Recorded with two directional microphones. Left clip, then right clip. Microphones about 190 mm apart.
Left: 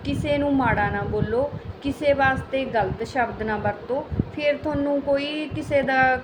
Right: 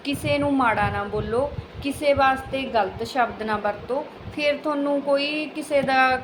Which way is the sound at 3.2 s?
5° left (ahead or behind).